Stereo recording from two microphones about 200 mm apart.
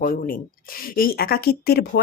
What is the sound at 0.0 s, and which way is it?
Speech, 45° left (ahead or behind).